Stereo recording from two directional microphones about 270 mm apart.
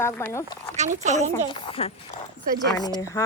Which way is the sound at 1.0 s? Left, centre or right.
Right.